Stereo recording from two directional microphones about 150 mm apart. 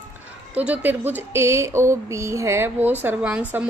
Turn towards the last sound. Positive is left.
turn(degrees=-10)  # may be behind; listen again after turning